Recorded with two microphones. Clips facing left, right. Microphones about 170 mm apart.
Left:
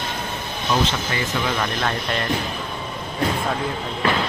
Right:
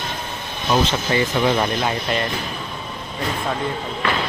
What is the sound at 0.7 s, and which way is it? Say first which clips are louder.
Speech: right 3 dB; 25° right (ahead or behind).